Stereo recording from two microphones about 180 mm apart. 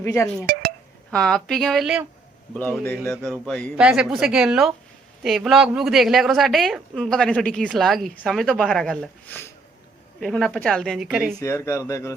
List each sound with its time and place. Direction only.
0.0 s speech: 15° left (ahead or behind)
0.5 s a sound: 55° right (ahead or behind)
1.1 s a woman's voice: 5° left (ahead or behind)
2.6 s a woman's voice: 10° left (ahead or behind)
11.3 s speech: 15° left (ahead or behind)